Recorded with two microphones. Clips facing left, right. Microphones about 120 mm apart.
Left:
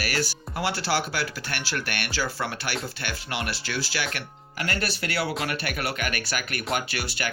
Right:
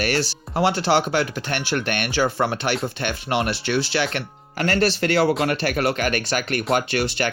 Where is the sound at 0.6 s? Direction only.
25° right (ahead or behind).